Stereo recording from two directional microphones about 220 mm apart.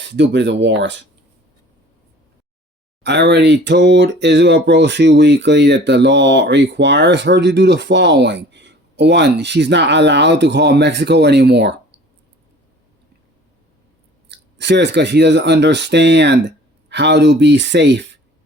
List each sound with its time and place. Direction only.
0.0 s speech: 55° right (ahead or behind)
3.0 s speech: 50° right (ahead or behind)
14.3 s speech: 50° right (ahead or behind)